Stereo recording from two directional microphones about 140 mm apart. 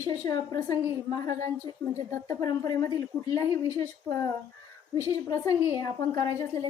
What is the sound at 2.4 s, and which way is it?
A woman's voice, 25° left (ahead or behind).